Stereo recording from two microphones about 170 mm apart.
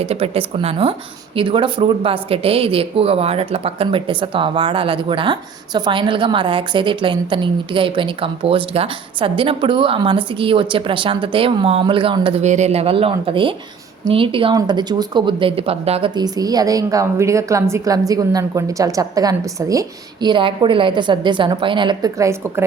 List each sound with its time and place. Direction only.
0.0 s a woman's voice: 35° right (ahead or behind)
12.4 s a woman's voice: 40° right (ahead or behind); by 22.6 s 15° right (ahead or behind)